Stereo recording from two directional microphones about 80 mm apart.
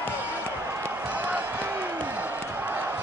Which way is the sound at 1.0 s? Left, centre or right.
Centre.